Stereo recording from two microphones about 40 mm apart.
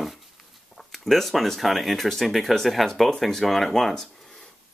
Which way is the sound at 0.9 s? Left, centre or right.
Centre.